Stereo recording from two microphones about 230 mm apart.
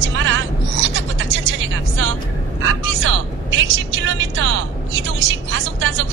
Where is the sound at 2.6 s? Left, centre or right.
Right.